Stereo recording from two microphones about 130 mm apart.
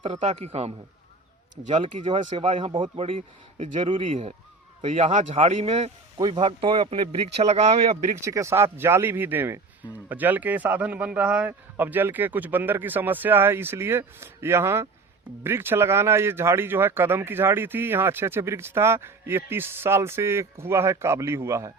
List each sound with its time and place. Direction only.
0.0 s a man's voice: 55° right (ahead or behind)
1.8 s a man's voice: 45° right (ahead or behind)
3.7 s speech: 70° right (ahead or behind)
3.9 s a man's voice: 50° right (ahead or behind)
4.9 s a man's voice: 60° right (ahead or behind)
6.1 s a man's voice: 35° right (ahead or behind); by 8.1 s 55° right (ahead or behind)
8.2 s speech: 25° right (ahead or behind)